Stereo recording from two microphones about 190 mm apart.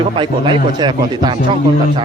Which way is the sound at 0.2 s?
25° right (ahead or behind).